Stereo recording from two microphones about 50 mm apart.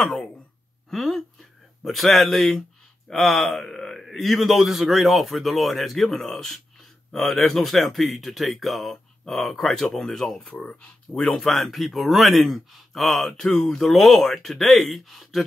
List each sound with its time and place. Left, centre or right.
0.8 s a sound: centre
3.1 s a man's voice: centre
10.6 s speech: centre
11.3 s a man's voice: centre